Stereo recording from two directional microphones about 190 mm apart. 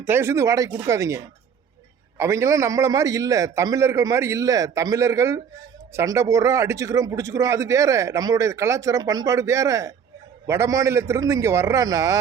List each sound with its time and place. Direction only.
0.0 s a man's voice: 10° right (ahead or behind)